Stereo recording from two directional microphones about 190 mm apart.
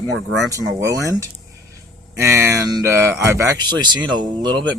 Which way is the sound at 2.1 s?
15° right (ahead or behind).